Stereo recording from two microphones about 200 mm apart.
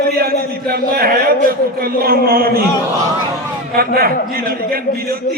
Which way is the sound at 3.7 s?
50° right (ahead or behind).